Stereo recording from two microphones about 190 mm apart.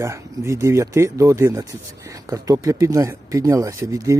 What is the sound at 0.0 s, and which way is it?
Speech, 15° right (ahead or behind).